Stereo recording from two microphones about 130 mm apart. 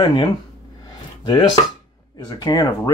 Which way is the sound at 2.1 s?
35° left (ahead or behind).